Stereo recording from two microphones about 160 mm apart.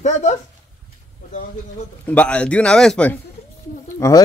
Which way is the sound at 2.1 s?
10° left (ahead or behind).